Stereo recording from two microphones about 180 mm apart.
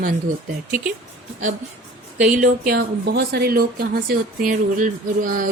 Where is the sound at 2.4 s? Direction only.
60° right (ahead or behind).